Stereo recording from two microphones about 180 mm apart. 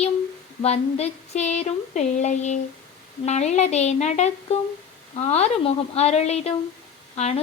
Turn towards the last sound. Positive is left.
turn(degrees=35)  # may be behind; listen again after turning